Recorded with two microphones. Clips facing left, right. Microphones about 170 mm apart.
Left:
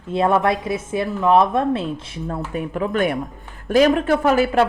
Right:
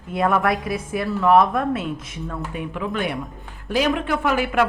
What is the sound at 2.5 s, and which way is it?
A woman's voice, 40° left (ahead or behind).